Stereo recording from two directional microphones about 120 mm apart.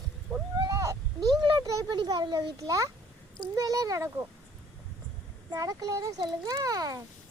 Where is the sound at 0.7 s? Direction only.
30° right (ahead or behind).